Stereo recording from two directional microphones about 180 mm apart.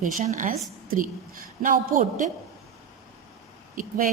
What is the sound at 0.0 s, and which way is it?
A woman's voice, 45° right (ahead or behind).